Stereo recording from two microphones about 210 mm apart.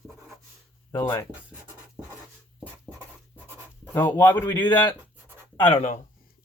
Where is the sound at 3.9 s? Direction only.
10° left (ahead or behind).